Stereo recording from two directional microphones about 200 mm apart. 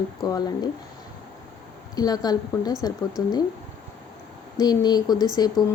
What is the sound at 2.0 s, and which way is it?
Speech, 20° left (ahead or behind).